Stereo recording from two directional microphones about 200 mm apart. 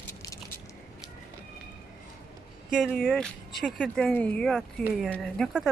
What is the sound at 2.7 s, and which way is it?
Speech, centre (ahead or behind).